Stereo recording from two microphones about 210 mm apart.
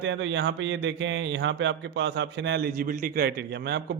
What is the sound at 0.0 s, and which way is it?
A man's voice, 60° right (ahead or behind).